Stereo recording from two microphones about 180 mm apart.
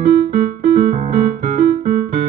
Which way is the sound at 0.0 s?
45° right (ahead or behind).